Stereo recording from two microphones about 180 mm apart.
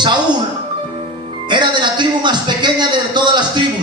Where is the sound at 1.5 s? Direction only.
25° right (ahead or behind).